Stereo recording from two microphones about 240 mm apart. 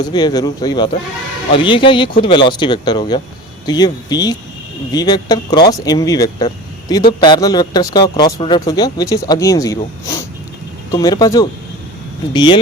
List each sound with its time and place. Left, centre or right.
0.0 s speech: centre